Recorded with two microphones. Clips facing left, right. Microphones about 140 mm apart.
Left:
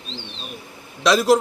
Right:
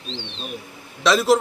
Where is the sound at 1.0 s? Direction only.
Centre (ahead or behind).